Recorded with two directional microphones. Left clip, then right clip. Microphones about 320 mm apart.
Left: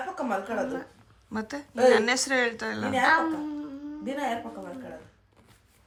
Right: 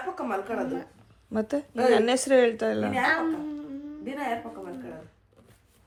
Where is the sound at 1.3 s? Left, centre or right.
Centre.